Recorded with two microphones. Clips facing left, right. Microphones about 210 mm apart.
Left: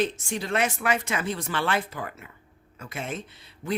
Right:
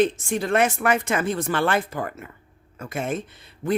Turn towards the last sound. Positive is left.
turn(degrees=-50)  # may be behind; listen again after turning